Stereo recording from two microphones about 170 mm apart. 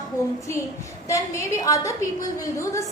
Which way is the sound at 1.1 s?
20° left (ahead or behind).